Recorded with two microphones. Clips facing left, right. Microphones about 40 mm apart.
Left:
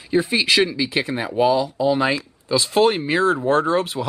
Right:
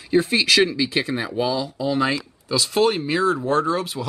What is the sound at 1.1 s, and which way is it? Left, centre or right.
Speech, centre.